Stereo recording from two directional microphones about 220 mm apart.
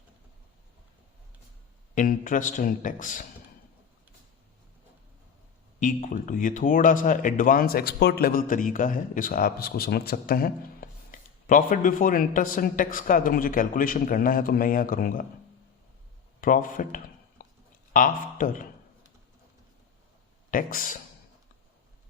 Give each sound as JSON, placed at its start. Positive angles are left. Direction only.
{"t": 2.0, "sound": "speech", "side_deg": 35}
{"t": 5.8, "sound": "speech", "side_deg": 35}
{"t": 16.4, "sound": "speech", "side_deg": 40}
{"t": 20.5, "sound": "speech", "side_deg": 40}